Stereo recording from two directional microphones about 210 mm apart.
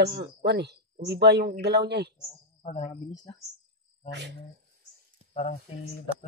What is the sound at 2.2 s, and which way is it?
Speech, 35° left (ahead or behind).